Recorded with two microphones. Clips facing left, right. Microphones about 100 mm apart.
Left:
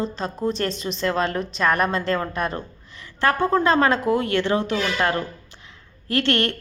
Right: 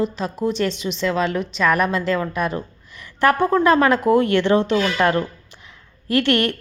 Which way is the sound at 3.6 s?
25° left (ahead or behind).